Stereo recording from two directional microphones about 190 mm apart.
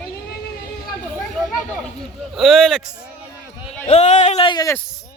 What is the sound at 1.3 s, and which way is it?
A man's voice, centre (ahead or behind).